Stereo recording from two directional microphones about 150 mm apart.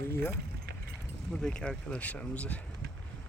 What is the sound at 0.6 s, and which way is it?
Vehicle, 90° right.